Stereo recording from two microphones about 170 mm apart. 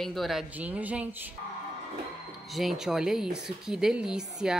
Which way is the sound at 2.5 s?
Centre (ahead or behind).